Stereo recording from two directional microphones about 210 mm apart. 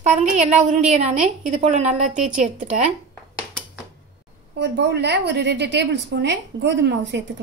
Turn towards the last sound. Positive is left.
turn(degrees=-55)  # may be behind; listen again after turning